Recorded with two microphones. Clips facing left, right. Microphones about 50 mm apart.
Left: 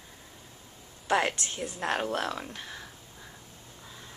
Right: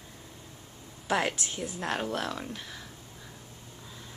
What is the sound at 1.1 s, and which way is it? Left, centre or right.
Speech, centre.